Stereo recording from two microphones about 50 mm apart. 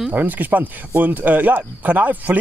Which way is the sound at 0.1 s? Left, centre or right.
Right.